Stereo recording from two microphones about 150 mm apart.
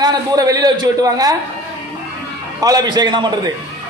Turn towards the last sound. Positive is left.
turn(degrees=-30)  # may be behind; listen again after turning